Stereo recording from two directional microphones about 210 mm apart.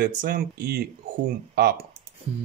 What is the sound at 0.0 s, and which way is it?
Speech, 45° right (ahead or behind).